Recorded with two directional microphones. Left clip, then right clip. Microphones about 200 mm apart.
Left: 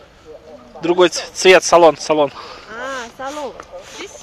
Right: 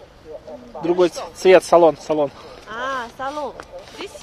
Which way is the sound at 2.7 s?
45° left (ahead or behind).